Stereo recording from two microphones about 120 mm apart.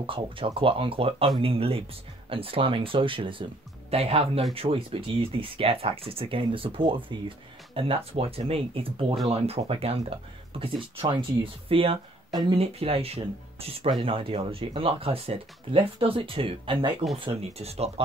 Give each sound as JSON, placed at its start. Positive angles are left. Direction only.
{"t": 0.0, "sound": "speech", "side_deg": -45}
{"t": 13.8, "sound": "speech", "side_deg": -45}
{"t": 17.2, "sound": "speech", "side_deg": -55}